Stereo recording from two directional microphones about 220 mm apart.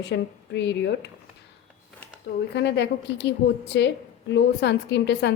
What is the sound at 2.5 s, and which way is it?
A woman's voice, 50° left (ahead or behind).